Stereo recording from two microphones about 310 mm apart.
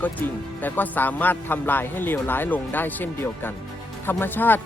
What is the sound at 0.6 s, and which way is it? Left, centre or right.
A man's voice, centre.